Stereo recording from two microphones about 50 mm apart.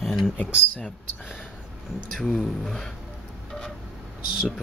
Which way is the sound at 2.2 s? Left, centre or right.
Centre.